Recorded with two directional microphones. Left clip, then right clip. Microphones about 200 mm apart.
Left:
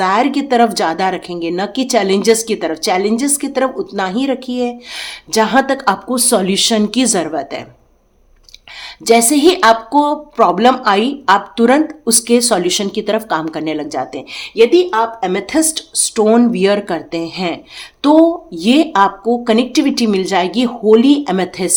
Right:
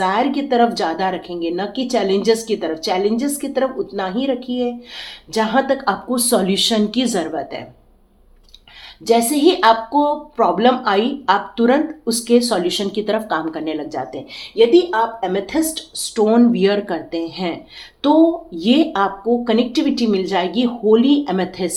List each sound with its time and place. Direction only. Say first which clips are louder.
0.0 s a woman's voice: left 4 dB; 40° left (ahead or behind)
9.0 s a woman's voice: left 4 dB; 40° left (ahead or behind)